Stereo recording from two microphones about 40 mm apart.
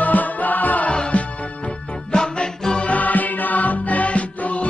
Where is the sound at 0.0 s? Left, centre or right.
Left.